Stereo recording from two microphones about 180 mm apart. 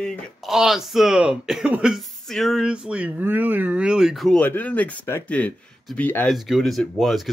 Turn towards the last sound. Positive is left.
turn(degrees=0)  # may be behind; listen again after turning